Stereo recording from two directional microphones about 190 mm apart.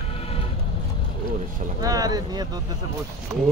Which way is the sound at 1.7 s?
20° right (ahead or behind).